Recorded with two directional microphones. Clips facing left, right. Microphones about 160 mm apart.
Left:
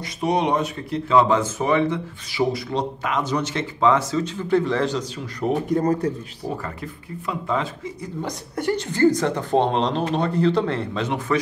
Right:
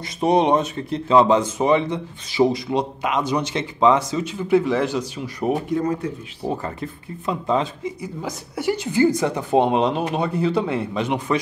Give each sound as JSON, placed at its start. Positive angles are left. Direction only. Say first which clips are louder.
{"t": 0.0, "sound": "speech", "louder": "right 4 dB", "side_deg": -25}
{"t": 5.8, "sound": "speech", "louder": "left 2 dB", "side_deg": 40}
{"t": 6.4, "sound": "speech", "louder": "right 4 dB", "side_deg": -25}
{"t": 8.2, "sound": "speech", "louder": "left 3 dB", "side_deg": -5}